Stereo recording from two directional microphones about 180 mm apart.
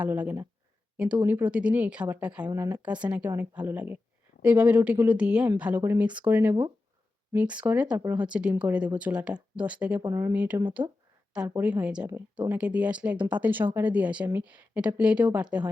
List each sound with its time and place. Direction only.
0.0 s a woman's voice: 10° right (ahead or behind)
10.8 s speech: 25° right (ahead or behind)
11.3 s a woman's voice: 10° right (ahead or behind)